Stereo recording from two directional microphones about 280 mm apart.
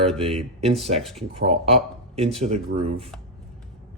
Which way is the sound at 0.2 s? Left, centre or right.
Right.